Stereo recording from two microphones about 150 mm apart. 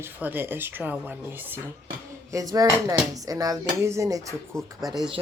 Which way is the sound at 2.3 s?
25° right (ahead or behind).